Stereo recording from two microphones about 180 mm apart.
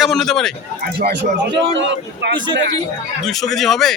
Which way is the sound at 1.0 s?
65° right (ahead or behind).